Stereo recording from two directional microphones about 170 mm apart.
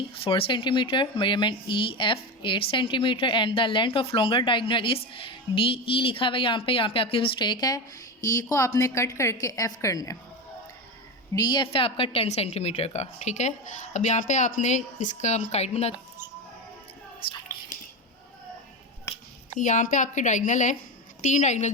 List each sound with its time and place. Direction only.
0.3 s a woman's voice: 30° left (ahead or behind)
11.3 s a woman's voice: 25° left (ahead or behind)
17.2 s a sound: 30° left (ahead or behind)
19.5 s a woman's voice: 50° left (ahead or behind)